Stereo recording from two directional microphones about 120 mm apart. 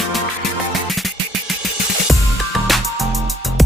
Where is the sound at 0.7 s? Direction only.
Centre (ahead or behind).